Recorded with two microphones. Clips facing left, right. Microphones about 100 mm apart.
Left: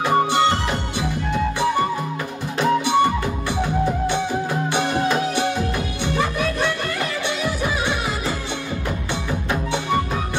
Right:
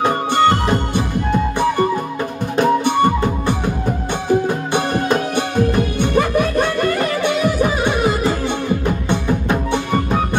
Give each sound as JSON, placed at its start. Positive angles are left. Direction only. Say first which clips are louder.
{"t": 0.0, "sound": "music", "louder": "right 3 dB", "side_deg": -50}
{"t": 2.5, "sound": "music", "louder": "right 3 dB", "side_deg": -50}
{"t": 4.7, "sound": "music", "louder": "right 3 dB", "side_deg": -50}
{"t": 9.1, "sound": "music", "louder": "right 6 dB", "side_deg": -50}